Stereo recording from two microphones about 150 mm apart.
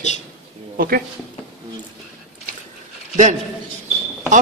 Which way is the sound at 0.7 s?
75° right (ahead or behind).